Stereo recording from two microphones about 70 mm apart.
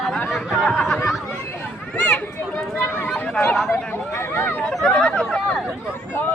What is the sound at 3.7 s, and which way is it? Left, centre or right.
Speech, left.